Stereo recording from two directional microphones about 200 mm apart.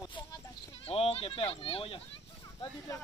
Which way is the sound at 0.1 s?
25° left (ahead or behind).